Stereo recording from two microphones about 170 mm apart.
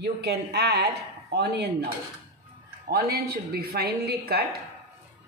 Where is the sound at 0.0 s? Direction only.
75° right (ahead or behind).